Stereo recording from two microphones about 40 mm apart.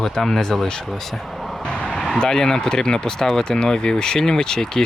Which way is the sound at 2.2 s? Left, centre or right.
Centre.